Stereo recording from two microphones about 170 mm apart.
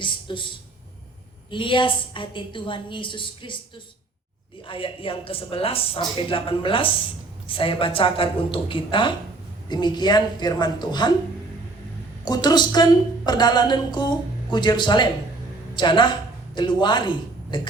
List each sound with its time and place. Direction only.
0.0 s a sound: 30° left (ahead or behind)
1.5 s a woman's voice: 30° left (ahead or behind)
4.6 s a woman's voice: 30° left (ahead or behind)
12.2 s a woman's voice: 25° left (ahead or behind)